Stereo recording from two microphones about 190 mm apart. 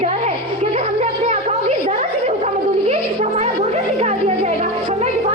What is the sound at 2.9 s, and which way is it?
Music, 35° right (ahead or behind).